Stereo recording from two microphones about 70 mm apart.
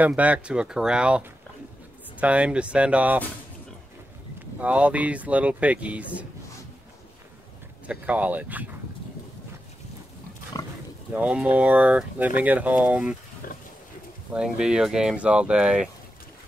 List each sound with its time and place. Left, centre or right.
0.0 s speech: right
4.6 s speech: right
7.8 s speech: right
11.3 s speech: centre
14.3 s speech: centre